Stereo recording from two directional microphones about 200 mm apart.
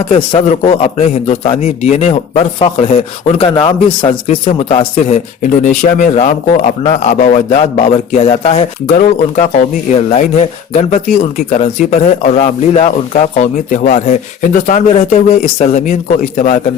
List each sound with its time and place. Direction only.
0.1 s a man's voice: 30° left (ahead or behind)
9.0 s a man's voice: 40° left (ahead or behind)